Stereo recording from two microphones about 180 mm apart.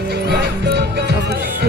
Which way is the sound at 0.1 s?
65° right (ahead or behind).